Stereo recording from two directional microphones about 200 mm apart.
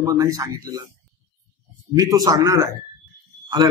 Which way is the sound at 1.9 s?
15° right (ahead or behind).